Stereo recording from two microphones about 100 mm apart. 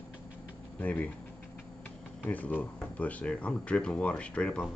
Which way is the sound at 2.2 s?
15° left (ahead or behind).